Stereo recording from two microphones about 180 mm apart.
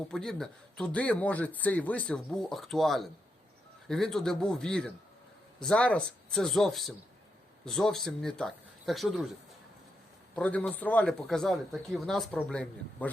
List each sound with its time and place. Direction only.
0.1 s speech: centre (ahead or behind)
10.3 s speech: 10° left (ahead or behind)